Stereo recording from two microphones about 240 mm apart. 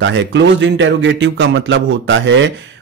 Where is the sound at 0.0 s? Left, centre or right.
Right.